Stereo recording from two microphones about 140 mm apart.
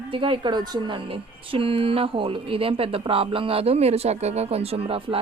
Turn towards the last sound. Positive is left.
turn(degrees=-45)  # may be behind; listen again after turning